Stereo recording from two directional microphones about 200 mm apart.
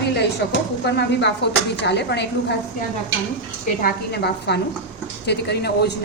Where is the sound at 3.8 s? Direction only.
50° left (ahead or behind).